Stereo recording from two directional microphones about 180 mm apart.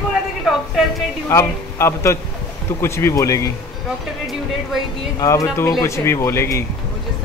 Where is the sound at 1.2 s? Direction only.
15° left (ahead or behind).